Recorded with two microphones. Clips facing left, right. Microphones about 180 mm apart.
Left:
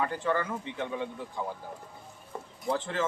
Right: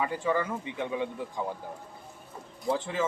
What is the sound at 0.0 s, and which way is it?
A man's voice, 10° right (ahead or behind).